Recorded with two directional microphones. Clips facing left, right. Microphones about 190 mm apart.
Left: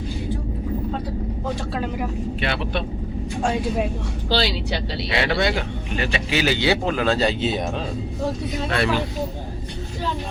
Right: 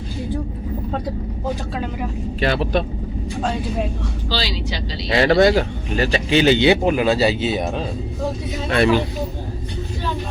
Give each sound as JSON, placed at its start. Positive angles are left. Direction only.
{"t": 2.4, "sound": "speech", "side_deg": -40}
{"t": 3.4, "sound": "speech", "side_deg": 10}
{"t": 4.3, "sound": "speech", "side_deg": 55}
{"t": 5.1, "sound": "speech", "side_deg": -45}
{"t": 8.7, "sound": "speech", "side_deg": -20}